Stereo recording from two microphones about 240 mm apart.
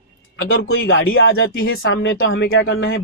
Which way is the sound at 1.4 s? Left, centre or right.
Left.